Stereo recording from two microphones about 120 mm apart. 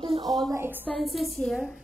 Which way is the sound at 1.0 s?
Centre (ahead or behind).